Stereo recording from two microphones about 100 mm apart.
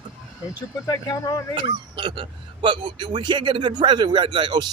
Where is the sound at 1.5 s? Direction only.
50° right (ahead or behind).